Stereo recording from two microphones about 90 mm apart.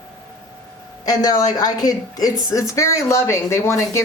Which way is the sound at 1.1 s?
45° left (ahead or behind).